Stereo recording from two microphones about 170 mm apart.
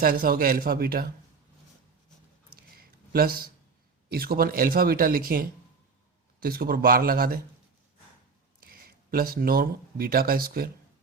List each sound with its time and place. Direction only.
0.0 s speech: 60° right (ahead or behind)
3.1 s speech: 60° right (ahead or behind)
8.6 s speech: 60° right (ahead or behind)